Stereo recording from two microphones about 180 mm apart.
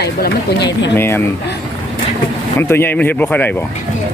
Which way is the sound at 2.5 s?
15° left (ahead or behind).